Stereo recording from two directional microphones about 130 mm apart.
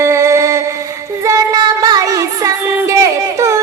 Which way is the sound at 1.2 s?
25° right (ahead or behind).